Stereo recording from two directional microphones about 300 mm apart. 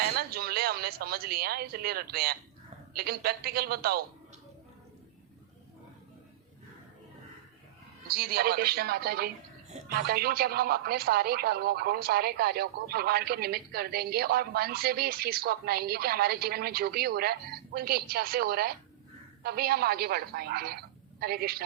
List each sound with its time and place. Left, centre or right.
0.0 s a man's voice: right
8.0 s a man's voice: right